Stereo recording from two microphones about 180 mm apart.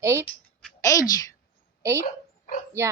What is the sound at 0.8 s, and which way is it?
Speech, 20° left (ahead or behind).